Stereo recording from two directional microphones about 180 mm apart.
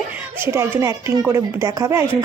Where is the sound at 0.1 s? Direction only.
10° right (ahead or behind).